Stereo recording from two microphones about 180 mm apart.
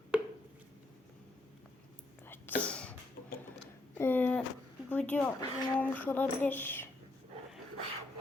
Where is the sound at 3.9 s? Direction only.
10° left (ahead or behind).